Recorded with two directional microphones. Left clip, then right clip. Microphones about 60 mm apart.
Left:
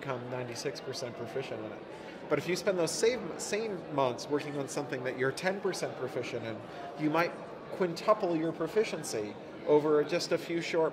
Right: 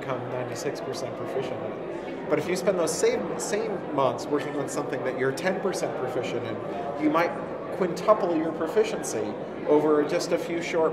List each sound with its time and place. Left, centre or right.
2.3 s speech: left
7.0 s a woman's voice: left